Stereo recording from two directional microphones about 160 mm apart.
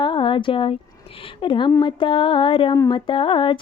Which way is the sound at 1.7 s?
20° left (ahead or behind).